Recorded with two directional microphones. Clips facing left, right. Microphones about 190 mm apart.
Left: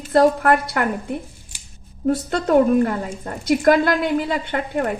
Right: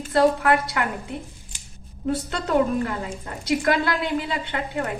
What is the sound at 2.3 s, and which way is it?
A woman's voice, 50° left (ahead or behind).